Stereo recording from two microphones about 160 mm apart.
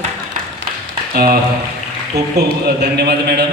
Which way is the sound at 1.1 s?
70° right (ahead or behind).